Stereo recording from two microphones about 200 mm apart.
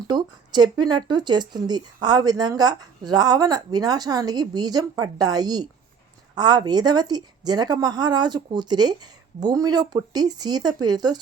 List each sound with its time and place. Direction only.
0.1 s speech: 20° right (ahead or behind)